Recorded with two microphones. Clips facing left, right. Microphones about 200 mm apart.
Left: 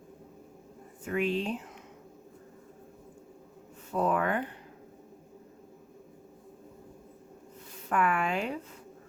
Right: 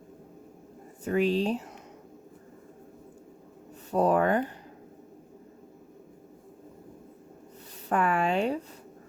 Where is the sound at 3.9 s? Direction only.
35° right (ahead or behind).